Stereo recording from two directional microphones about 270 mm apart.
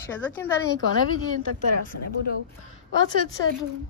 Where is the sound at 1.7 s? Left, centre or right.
Left.